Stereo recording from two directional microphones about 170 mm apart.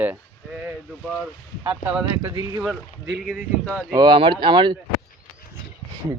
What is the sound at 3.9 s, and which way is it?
Speech, 25° right (ahead or behind).